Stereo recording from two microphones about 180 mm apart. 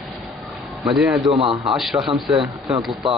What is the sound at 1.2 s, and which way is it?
Speech, 35° right (ahead or behind).